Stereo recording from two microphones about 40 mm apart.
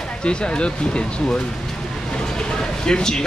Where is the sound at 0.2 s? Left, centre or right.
Left.